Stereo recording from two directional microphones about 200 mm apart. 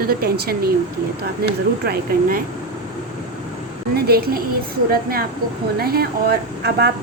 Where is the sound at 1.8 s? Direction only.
50° right (ahead or behind).